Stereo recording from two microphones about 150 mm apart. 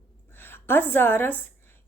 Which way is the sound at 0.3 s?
15° left (ahead or behind).